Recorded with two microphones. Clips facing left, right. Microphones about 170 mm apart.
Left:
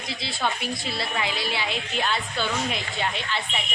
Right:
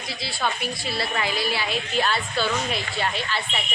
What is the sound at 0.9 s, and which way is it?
A woman's voice, 20° left (ahead or behind).